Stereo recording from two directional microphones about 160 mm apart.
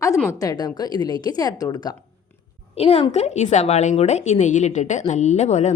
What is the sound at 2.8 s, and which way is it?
A woman's voice, 40° left (ahead or behind).